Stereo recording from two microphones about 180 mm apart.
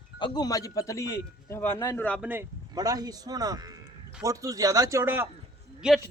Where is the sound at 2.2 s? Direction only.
10° right (ahead or behind).